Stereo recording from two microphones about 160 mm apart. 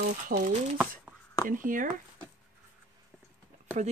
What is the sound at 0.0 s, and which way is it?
Speech, 75° right (ahead or behind).